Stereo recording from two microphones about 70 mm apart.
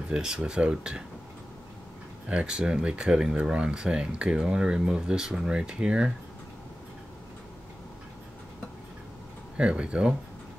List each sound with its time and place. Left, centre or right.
0.1 s speech: centre
2.2 s speech: centre
9.6 s speech: centre